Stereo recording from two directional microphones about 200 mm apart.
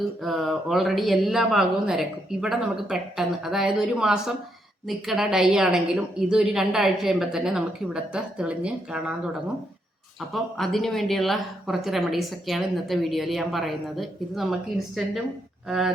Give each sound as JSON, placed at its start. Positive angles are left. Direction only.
{"t": 0.2, "sound": "speech", "side_deg": 0}
{"t": 10.2, "sound": "speech", "side_deg": 0}